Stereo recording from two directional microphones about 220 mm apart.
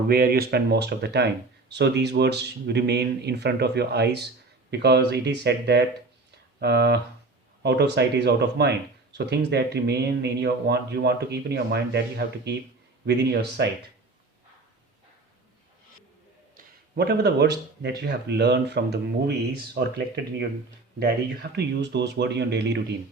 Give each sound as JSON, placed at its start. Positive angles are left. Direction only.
{"t": 0.1, "sound": "speech", "side_deg": -45}
{"t": 16.6, "sound": "speech", "side_deg": -45}
{"t": 21.5, "sound": "speech", "side_deg": -50}